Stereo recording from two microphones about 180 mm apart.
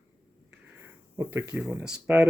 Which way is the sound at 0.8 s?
10° right (ahead or behind).